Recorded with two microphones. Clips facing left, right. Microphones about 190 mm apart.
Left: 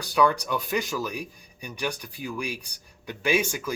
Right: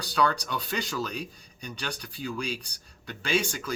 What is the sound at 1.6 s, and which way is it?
Speech, 10° left (ahead or behind).